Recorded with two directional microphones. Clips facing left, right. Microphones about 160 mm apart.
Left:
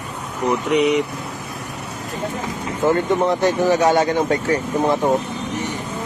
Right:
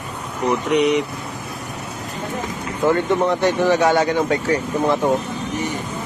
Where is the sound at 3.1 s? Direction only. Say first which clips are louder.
Even; 15° left (ahead or behind).